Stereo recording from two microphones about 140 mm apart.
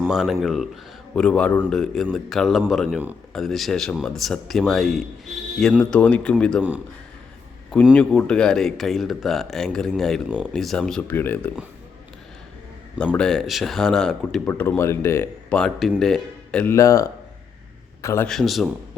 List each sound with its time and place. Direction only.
0.1 s speech: centre (ahead or behind)
6.6 s speech: 10° right (ahead or behind)
7.9 s speech: 5° left (ahead or behind)
10.2 s speech: 10° right (ahead or behind)
10.5 s speech: centre (ahead or behind)
13.1 s speech: 5° left (ahead or behind)
15.5 s speech: 5° left (ahead or behind)
16.7 s a man's voice: 25° left (ahead or behind)
18.3 s speech: centre (ahead or behind)